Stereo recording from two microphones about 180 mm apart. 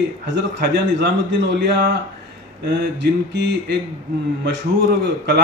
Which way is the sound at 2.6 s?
75° right (ahead or behind).